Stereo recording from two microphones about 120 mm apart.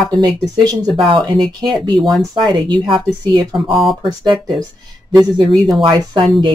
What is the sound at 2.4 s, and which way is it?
Speech, 40° right (ahead or behind).